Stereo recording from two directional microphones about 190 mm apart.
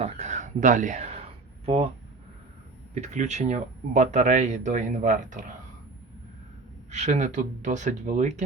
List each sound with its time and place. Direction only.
0.0 s a sound: 35° right (ahead or behind)
1.6 s speech: 30° right (ahead or behind)
2.9 s speech: 35° right (ahead or behind)
6.9 s speech: 35° right (ahead or behind)